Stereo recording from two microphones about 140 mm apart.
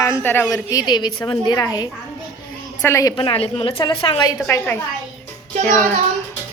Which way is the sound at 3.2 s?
40° left (ahead or behind).